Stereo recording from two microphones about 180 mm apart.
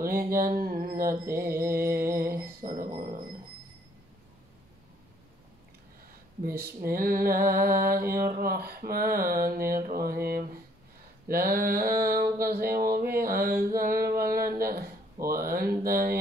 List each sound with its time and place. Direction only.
0.0 s mantra: 55° right (ahead or behind)
1.3 s a sound: 55° right (ahead or behind)
2.3 s mantra: 50° right (ahead or behind)
6.4 s mantra: 55° right (ahead or behind)
11.2 s a sound: 55° right (ahead or behind)
15.2 s mantra: 55° right (ahead or behind)